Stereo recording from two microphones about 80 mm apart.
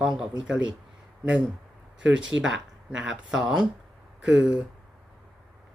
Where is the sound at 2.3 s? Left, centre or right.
Left.